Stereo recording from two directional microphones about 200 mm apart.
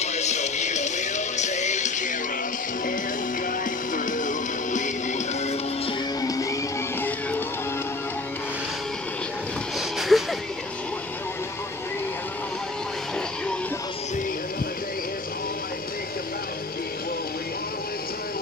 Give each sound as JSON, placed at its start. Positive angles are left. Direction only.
{"t": 0.0, "sound": "music", "side_deg": 35}
{"t": 3.9, "sound": "music", "side_deg": 40}
{"t": 6.2, "sound": "music", "side_deg": 15}
{"t": 9.8, "sound": "vehicle", "side_deg": 0}